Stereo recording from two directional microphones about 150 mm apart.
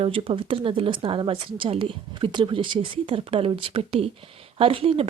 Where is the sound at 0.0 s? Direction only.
40° right (ahead or behind).